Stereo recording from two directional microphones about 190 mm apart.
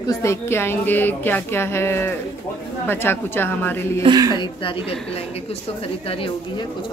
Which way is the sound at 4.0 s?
20° right (ahead or behind).